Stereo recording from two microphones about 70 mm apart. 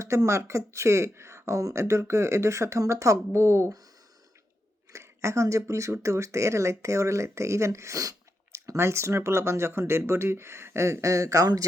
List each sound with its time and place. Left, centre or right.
0.0 s speech: right
4.9 s speech: right
8.5 s speech: right